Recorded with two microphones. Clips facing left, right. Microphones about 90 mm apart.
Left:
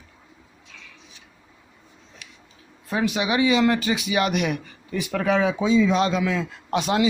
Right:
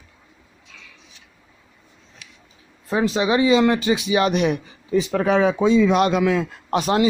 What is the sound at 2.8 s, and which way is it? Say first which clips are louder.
Speech: right 4 dB; 30° right (ahead or behind).